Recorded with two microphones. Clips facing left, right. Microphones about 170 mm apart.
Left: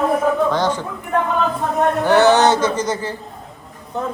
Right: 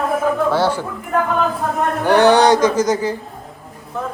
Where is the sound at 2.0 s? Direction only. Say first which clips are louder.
Right 2 dB; 15° right (ahead or behind).